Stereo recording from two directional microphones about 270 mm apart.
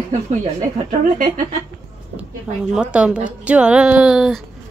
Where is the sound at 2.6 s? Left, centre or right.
Centre.